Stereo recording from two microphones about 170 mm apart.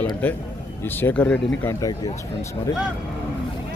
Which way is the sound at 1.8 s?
20° left (ahead or behind).